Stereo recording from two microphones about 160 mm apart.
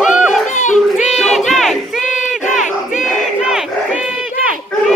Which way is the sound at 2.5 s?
5° right (ahead or behind).